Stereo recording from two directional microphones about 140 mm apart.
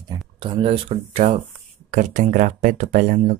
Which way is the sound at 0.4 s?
35° right (ahead or behind).